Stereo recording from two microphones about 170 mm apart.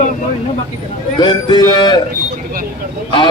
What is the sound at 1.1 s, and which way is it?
Speech, 25° left (ahead or behind).